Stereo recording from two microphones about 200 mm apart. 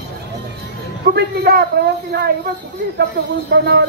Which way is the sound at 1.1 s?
50° right (ahead or behind).